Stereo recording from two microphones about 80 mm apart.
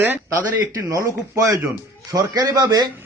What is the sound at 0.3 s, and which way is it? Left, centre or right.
A man's voice, right.